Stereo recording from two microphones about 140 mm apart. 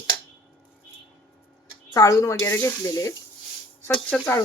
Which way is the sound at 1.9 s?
25° left (ahead or behind).